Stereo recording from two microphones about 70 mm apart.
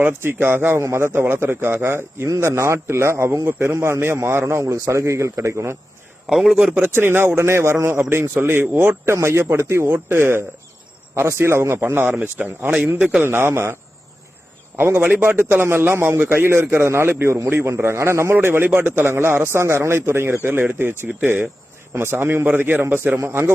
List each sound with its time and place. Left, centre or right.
0.0 s a man's voice: right
6.2 s a man's voice: centre
6.8 s a man's voice: right
13.2 s a man's voice: right
14.8 s a man's voice: right